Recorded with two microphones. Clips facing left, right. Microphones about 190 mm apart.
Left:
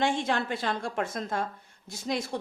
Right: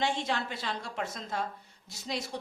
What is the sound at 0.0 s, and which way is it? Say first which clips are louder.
A woman's voice: left 4 dB; 50° left (ahead or behind).